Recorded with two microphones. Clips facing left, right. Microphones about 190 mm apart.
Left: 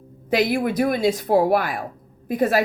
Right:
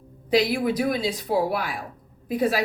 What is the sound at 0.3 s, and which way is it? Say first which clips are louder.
Speech: left 1 dB; 55° left (ahead or behind).